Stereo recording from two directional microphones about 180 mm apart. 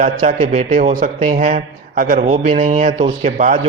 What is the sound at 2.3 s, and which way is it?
Speech, 30° right (ahead or behind).